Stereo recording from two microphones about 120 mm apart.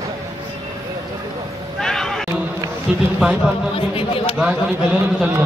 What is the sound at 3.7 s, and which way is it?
Speech, 50° left (ahead or behind).